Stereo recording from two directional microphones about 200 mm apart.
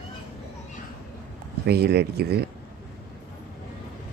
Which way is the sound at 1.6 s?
55° right (ahead or behind).